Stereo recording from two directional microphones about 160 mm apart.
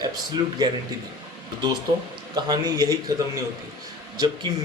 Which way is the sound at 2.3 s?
25° right (ahead or behind).